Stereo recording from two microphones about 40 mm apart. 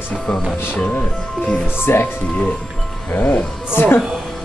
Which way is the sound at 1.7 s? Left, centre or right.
Left.